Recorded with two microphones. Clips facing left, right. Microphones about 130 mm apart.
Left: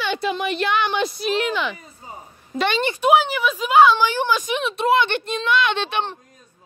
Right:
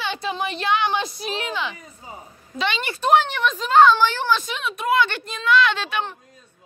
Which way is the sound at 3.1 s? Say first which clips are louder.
Even; 5° left (ahead or behind).